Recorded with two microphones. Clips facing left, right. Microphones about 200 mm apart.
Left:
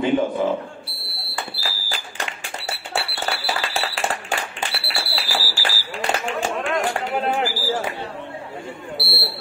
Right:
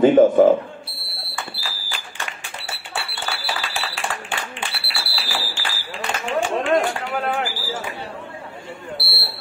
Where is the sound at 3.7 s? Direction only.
40° left (ahead or behind).